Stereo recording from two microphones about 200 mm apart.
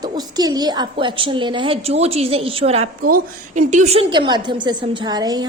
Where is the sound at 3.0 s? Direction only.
40° right (ahead or behind).